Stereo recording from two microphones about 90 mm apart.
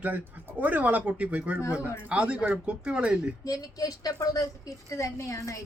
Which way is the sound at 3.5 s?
45° left (ahead or behind).